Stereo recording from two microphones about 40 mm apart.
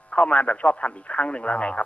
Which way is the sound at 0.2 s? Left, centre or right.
Left.